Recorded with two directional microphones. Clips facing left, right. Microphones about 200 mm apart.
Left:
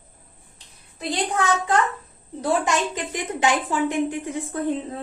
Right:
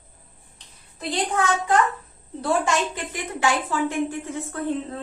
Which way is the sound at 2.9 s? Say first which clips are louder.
Left 3 dB; 20° left (ahead or behind).